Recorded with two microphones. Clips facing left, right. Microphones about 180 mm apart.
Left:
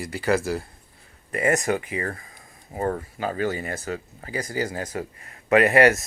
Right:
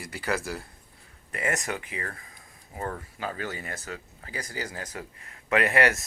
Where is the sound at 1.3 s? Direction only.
45° left (ahead or behind).